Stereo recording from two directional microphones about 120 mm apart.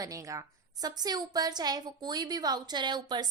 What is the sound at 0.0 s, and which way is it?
A woman's voice, 30° right (ahead or behind).